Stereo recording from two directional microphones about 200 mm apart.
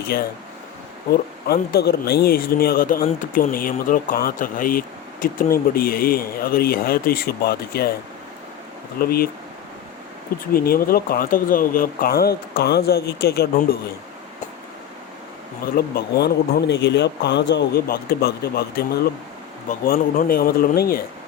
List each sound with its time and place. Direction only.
0.1 s a man's voice: 50° left (ahead or behind)
1.7 s a man's voice: 50° left (ahead or behind)
9.0 s a man's voice: 50° left (ahead or behind)
10.5 s a man's voice: 50° left (ahead or behind)
15.6 s a man's voice: 50° left (ahead or behind)